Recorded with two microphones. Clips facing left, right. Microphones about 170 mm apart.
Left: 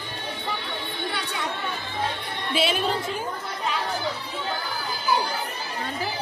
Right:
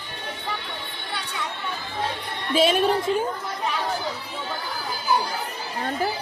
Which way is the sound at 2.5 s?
40° right (ahead or behind).